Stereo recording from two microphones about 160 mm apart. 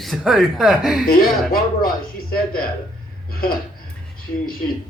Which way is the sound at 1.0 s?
65° left (ahead or behind).